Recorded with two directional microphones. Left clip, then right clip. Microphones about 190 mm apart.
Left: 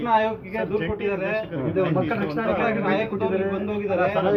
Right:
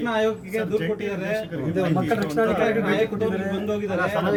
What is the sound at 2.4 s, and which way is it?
Speech, 60° right (ahead or behind).